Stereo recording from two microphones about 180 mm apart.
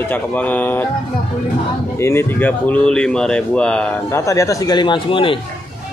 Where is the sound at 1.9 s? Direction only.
15° left (ahead or behind); by 5.4 s 30° left (ahead or behind).